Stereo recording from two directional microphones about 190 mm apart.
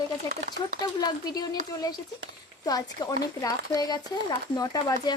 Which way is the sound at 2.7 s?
20° left (ahead or behind).